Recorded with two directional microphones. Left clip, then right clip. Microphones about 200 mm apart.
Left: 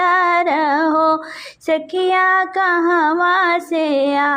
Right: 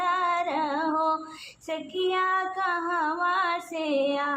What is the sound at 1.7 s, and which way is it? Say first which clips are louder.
Music: left 12 dB; 40° left (ahead or behind).